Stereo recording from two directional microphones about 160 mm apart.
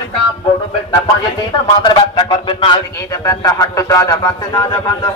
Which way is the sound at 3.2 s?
20° left (ahead or behind).